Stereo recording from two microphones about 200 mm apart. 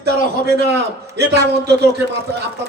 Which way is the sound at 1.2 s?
55° right (ahead or behind).